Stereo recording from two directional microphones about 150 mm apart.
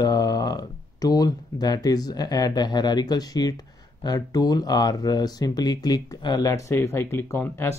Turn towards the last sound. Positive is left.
turn(degrees=15)  # may be behind; listen again after turning